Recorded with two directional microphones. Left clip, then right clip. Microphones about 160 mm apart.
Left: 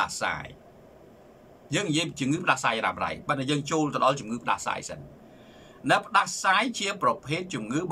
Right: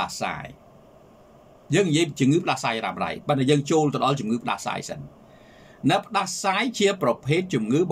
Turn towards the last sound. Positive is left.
turn(degrees=-25)  # may be behind; listen again after turning